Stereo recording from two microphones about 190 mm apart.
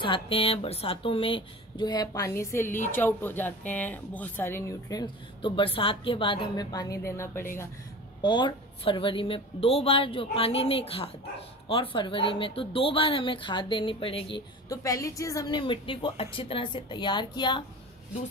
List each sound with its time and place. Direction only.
0.0 s speech: 30° left (ahead or behind)
8.2 s speech: 25° left (ahead or behind)